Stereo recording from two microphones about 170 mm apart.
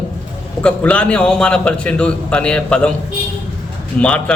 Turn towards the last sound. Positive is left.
turn(degrees=5)  # may be behind; listen again after turning